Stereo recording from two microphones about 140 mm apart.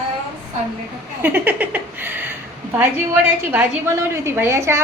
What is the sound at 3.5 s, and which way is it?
A woman's voice, 15° right (ahead or behind).